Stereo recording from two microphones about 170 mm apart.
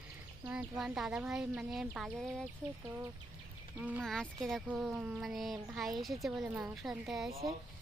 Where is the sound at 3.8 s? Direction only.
10° right (ahead or behind).